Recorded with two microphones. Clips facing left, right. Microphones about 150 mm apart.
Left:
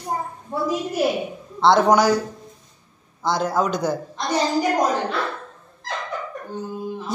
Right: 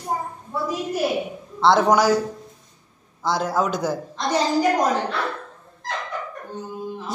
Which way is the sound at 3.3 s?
Centre (ahead or behind).